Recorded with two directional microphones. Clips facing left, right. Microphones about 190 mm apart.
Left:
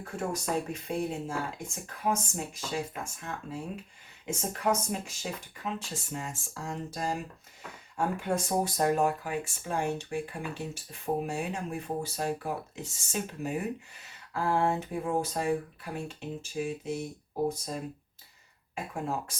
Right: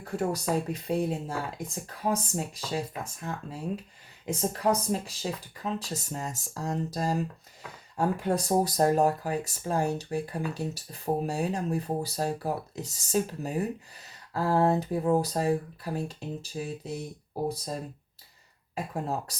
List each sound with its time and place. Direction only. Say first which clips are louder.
0.7 s speech: right 4 dB; 35° right (ahead or behind)
18.7 s speech: right 2 dB; 35° right (ahead or behind)